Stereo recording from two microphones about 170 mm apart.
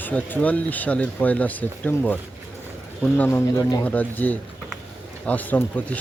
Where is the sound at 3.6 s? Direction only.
20° left (ahead or behind).